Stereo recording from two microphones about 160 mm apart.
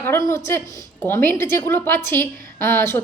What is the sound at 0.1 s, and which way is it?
Speech, 20° left (ahead or behind).